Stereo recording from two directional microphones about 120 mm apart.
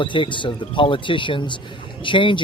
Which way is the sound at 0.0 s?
45° left (ahead or behind).